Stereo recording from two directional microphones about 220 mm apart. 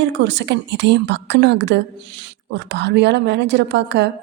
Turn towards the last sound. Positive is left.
turn(degrees=-50)  # may be behind; listen again after turning